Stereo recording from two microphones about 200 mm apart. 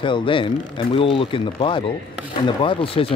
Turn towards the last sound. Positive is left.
turn(degrees=25)  # may be behind; listen again after turning